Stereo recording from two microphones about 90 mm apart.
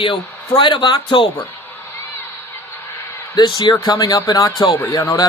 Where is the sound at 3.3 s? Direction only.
55° left (ahead or behind).